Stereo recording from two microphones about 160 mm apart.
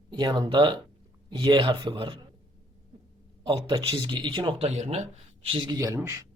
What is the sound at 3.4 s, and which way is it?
Speech, 30° right (ahead or behind).